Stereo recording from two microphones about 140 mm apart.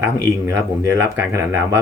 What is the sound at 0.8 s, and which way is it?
Speech, 20° right (ahead or behind).